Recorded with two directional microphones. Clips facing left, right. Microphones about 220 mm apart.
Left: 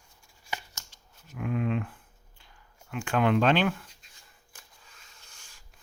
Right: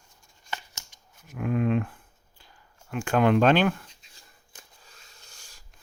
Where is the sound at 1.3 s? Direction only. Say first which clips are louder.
Right 4 dB; 45° right (ahead or behind).